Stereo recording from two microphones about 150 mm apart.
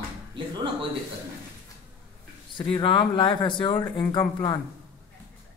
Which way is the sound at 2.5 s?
35° left (ahead or behind).